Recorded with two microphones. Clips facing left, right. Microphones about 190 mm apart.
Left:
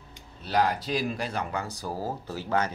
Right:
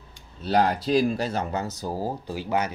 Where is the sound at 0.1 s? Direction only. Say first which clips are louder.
Right 5 dB; 30° right (ahead or behind).